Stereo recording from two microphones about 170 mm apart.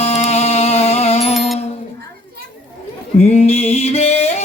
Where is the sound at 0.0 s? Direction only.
40° left (ahead or behind).